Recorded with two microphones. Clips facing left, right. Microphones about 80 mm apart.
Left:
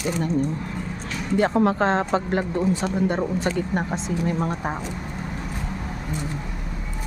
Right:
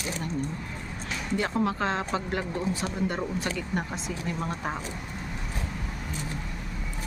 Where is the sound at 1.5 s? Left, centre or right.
Left.